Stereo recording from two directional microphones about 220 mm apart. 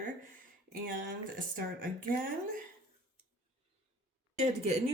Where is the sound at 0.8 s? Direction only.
40° right (ahead or behind).